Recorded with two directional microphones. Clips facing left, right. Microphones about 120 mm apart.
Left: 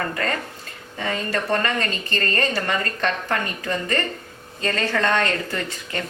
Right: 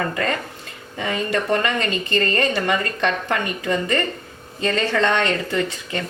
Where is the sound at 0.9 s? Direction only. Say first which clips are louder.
Right 3 dB; 20° right (ahead or behind).